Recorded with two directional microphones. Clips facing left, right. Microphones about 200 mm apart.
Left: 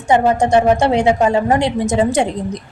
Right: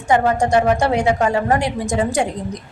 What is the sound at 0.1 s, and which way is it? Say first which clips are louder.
A woman's voice: left 3 dB; 20° left (ahead or behind).